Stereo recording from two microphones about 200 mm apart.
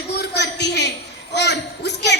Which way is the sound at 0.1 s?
55° left (ahead or behind).